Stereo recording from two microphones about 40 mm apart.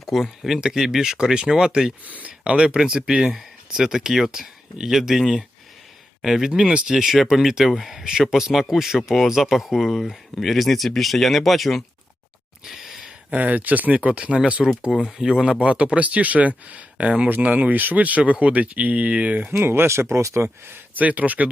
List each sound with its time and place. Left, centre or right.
0.0 s speech: centre
2.0 s speech: right
2.4 s speech: right
4.9 s speech: centre
6.5 s speech: right; by 11.8 s centre
12.6 s a sound: centre
13.0 s a sound: right
13.4 s speech: right
14.8 s speech: centre
15.6 s speech: right
19.5 s speech: right
20.4 s speech: right
20.9 s speech: right